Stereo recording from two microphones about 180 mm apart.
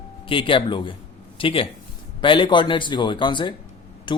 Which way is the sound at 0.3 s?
30° left (ahead or behind).